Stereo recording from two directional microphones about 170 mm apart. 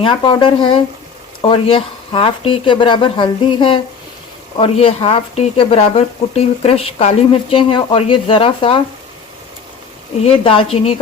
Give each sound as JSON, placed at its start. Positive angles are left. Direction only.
{"t": 0.0, "sound": "speech", "side_deg": 30}
{"t": 10.2, "sound": "speech", "side_deg": 35}